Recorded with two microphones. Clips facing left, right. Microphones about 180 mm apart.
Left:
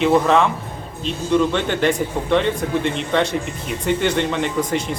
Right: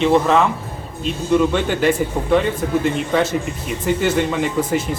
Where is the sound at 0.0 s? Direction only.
Centre (ahead or behind).